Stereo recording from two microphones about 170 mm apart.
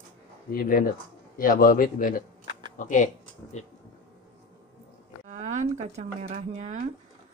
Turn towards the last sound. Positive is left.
turn(degrees=-45)  # may be behind; listen again after turning